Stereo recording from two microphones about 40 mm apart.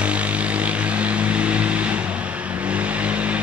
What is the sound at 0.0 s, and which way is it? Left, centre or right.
Vehicle, right.